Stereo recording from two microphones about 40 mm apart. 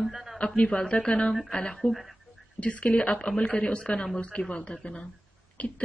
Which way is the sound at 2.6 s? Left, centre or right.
Left.